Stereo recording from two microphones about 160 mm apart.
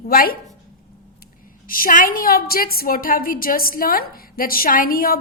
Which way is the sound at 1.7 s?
60° left (ahead or behind).